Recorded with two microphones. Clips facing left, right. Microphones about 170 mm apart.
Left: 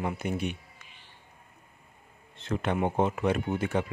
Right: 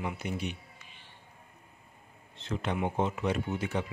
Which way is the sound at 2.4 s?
55° left (ahead or behind).